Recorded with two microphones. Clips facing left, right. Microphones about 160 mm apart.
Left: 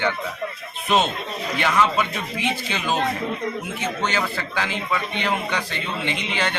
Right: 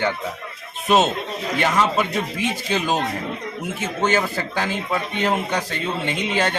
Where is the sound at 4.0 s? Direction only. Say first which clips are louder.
Right 7 dB; 45° right (ahead or behind).